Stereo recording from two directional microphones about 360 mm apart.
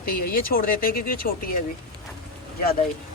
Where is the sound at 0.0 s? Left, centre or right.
Left.